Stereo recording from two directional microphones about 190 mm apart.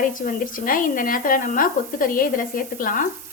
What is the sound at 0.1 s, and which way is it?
Speech, 45° left (ahead or behind).